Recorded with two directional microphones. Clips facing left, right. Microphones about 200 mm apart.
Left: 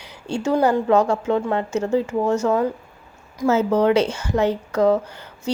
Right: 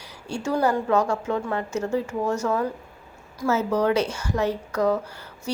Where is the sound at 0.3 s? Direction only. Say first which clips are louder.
Left 4 dB; 25° left (ahead or behind).